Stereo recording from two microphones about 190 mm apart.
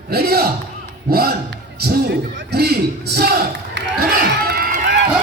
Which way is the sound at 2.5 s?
55° right (ahead or behind).